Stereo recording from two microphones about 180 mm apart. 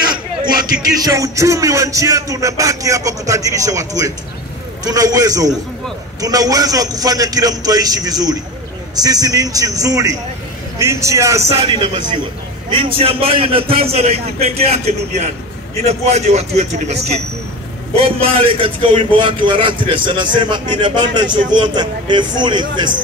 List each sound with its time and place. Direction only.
1.0 s a man's voice: 20° right (ahead or behind)